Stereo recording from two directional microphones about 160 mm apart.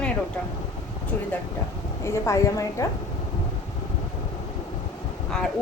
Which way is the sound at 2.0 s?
15° left (ahead or behind).